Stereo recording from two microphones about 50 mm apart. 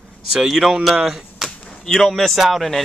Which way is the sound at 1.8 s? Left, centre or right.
Centre.